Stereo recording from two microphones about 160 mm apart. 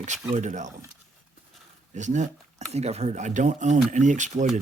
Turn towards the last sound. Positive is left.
turn(degrees=-50)  # may be behind; listen again after turning